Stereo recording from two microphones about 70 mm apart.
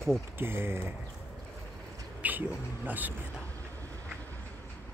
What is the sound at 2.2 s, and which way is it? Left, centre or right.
Speech, right.